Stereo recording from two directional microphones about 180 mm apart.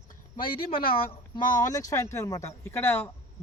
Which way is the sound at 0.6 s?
30° left (ahead or behind).